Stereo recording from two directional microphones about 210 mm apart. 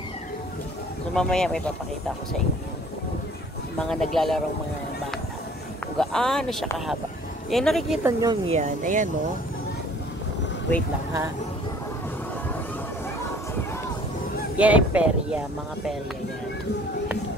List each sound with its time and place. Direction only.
1.1 s speech: 5° left (ahead or behind)
3.9 s speech: centre (ahead or behind)
5.9 s speech: centre (ahead or behind)
8.0 s speech: 15° right (ahead or behind)
8.5 s speech: 35° right (ahead or behind)
14.6 s speech: 5° right (ahead or behind)